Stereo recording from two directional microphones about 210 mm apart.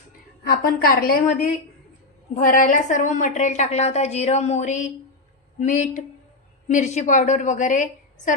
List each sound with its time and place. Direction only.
0.4 s a woman's voice: 45° left (ahead or behind)
2.3 s a woman's voice: 35° left (ahead or behind)